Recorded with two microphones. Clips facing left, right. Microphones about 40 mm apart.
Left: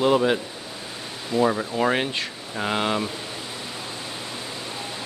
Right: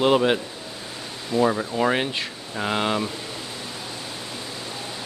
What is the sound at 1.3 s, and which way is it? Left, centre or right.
Speech, centre.